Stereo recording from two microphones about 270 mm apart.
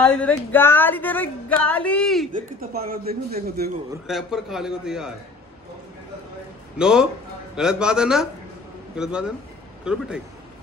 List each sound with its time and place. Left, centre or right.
0.0 s speech: centre
2.3 s speech: right
4.1 s a man's voice: centre
6.8 s a man's voice: centre